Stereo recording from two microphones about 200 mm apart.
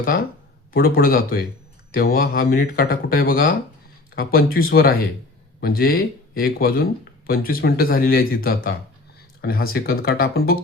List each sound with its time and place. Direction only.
0.7 s speech: 45° left (ahead or behind)